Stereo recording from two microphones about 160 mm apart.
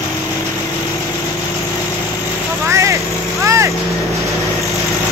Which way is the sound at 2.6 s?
20° right (ahead or behind).